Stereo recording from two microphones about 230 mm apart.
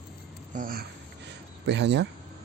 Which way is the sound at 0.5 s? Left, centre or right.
Right.